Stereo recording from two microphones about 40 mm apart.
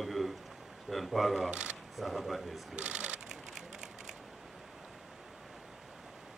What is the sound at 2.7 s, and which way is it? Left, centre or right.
Shuffling cards, right.